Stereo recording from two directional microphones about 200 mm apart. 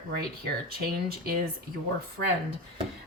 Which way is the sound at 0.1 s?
50° right (ahead or behind).